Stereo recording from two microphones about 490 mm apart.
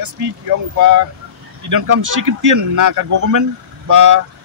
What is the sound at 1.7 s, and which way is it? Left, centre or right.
A man's voice, right.